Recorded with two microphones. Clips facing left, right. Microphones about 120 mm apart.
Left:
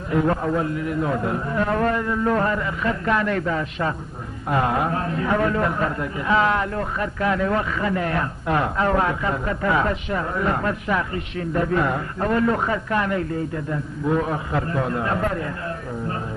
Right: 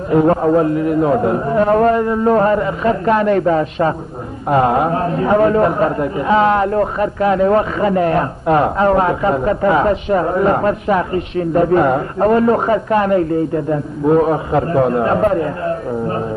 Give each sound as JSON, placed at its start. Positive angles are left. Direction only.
{"t": 0.1, "sound": "a man's voice", "side_deg": -35}